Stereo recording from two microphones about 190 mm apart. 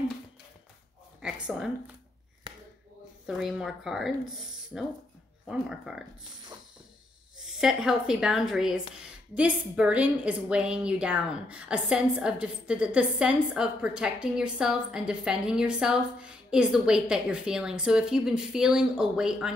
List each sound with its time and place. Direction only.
1.2 s a sound: 5° right (ahead or behind)
2.4 s chop: 25° right (ahead or behind)
3.3 s a woman's voice: centre (ahead or behind)
7.3 s a woman's voice: 5° right (ahead or behind)